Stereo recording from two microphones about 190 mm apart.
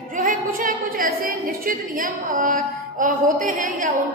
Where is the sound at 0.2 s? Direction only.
45° right (ahead or behind).